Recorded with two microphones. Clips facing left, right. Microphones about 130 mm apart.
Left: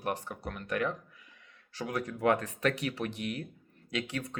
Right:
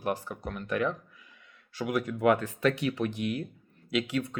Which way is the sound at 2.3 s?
35° right (ahead or behind).